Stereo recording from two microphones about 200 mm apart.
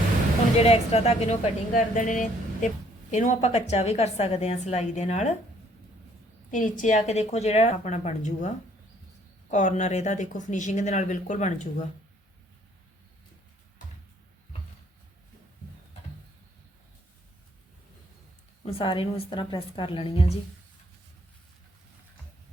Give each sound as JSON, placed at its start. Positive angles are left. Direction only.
{"t": 0.5, "sound": "speech", "side_deg": 30}
{"t": 6.5, "sound": "speech", "side_deg": 40}
{"t": 18.6, "sound": "a woman's voice", "side_deg": 30}